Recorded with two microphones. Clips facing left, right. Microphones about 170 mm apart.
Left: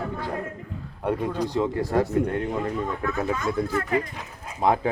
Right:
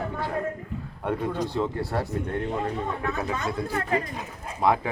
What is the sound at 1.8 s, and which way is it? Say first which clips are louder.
Speech: left 5 dB; 45° left (ahead or behind).